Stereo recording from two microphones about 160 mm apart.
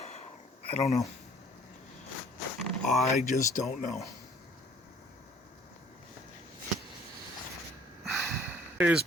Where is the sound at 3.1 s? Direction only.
50° left (ahead or behind).